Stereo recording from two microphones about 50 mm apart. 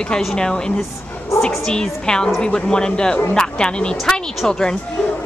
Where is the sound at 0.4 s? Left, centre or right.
Centre.